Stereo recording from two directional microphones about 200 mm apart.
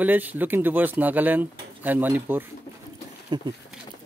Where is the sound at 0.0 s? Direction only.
10° right (ahead or behind).